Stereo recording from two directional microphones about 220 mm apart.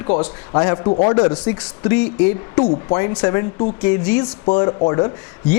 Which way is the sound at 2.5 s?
20° left (ahead or behind).